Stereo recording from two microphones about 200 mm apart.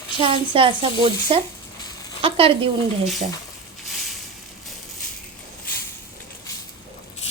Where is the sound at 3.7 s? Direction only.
Centre (ahead or behind).